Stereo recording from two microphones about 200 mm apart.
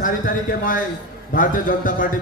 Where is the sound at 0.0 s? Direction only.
45° left (ahead or behind).